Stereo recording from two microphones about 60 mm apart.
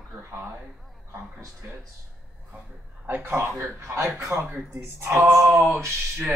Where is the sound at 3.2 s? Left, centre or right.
Right.